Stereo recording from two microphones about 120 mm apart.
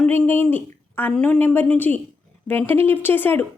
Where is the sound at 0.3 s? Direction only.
15° left (ahead or behind).